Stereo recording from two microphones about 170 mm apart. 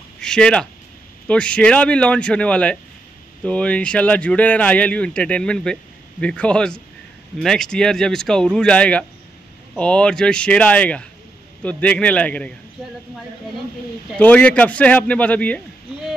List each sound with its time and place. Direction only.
0.2 s speech: 5° left (ahead or behind)
14.1 s speech: 10° left (ahead or behind)